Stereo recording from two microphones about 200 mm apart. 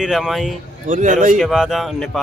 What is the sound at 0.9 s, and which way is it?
Speech, 40° right (ahead or behind).